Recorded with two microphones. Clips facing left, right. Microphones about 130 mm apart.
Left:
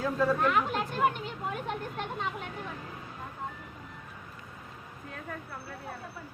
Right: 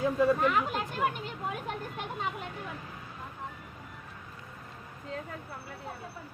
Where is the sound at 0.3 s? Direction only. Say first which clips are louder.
Left 1 dB; centre (ahead or behind).